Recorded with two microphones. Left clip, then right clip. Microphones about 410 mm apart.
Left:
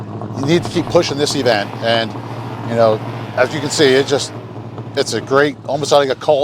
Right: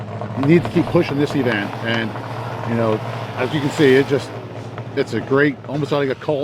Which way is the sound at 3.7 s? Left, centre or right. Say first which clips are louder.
Left 2 dB; left.